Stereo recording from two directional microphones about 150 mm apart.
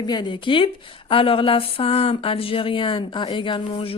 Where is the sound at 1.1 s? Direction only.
35° left (ahead or behind).